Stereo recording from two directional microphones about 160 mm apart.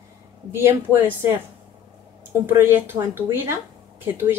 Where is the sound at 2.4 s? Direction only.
15° right (ahead or behind).